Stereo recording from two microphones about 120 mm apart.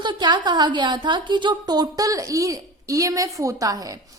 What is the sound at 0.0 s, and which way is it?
A woman's voice, 40° right (ahead or behind).